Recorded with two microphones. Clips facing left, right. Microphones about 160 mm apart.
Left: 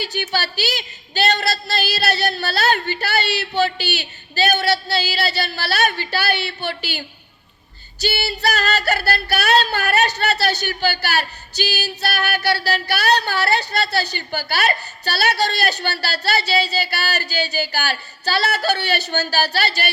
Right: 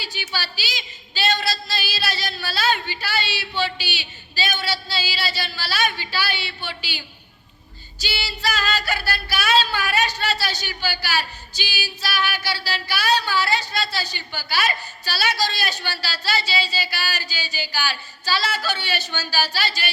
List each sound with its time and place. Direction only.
0.0 s female singing: 55° left (ahead or behind)
2.7 s speech: 45° left (ahead or behind)
3.0 s female singing: 60° left (ahead or behind)
8.1 s female singing: 60° left (ahead or behind)